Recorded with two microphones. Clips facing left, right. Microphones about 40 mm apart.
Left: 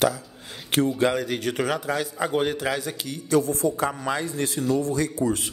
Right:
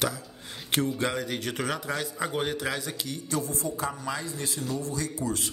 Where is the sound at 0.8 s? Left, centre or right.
Centre.